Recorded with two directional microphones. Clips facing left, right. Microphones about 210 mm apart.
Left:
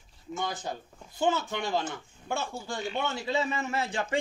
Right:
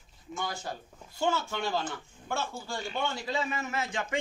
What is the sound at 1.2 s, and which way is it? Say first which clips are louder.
A man's voice: left 2 dB; 15° left (ahead or behind).